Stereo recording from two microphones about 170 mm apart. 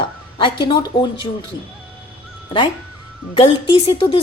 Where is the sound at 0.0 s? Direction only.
30° left (ahead or behind).